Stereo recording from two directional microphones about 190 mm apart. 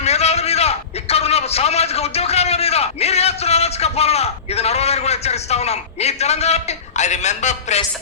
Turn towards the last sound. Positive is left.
turn(degrees=35)  # may be behind; listen again after turning